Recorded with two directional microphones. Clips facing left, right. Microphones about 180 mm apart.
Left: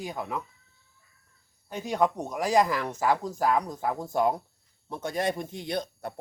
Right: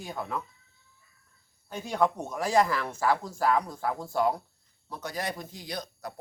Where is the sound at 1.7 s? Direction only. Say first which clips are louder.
Left 1 dB; 15° left (ahead or behind).